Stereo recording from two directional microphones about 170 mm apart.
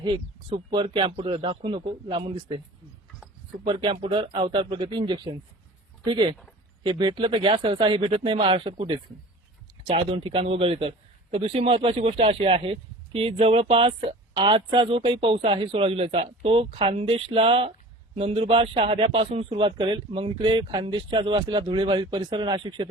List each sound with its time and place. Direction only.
0.7 s speech: 30° right (ahead or behind)
3.6 s a man's voice: 30° right (ahead or behind)
10.1 s a man's voice: 35° right (ahead or behind)